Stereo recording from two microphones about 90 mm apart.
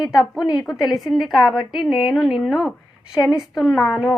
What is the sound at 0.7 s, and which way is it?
A woman's voice, 5° right (ahead or behind).